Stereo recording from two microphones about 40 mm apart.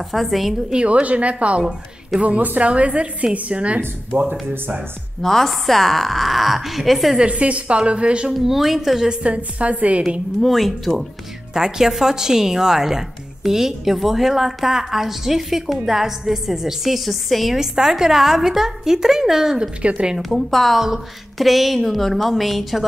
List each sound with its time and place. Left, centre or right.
0.1 s a woman's voice: centre
0.8 s a woman's voice: right
5.2 s a woman's voice: centre
7.2 s a woman's voice: right
8.3 s a woman's voice: centre
9.0 s a woman's voice: right
10.4 s a woman's voice: centre
11.5 s a woman's voice: centre
17.6 s a woman's voice: centre
19.8 s a woman's voice: right
20.3 s a woman's voice: centre